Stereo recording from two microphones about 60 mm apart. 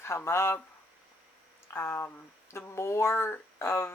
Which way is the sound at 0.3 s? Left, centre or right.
Left.